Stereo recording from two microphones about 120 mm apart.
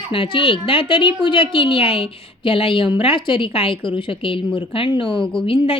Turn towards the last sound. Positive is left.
turn(degrees=50)  # may be behind; listen again after turning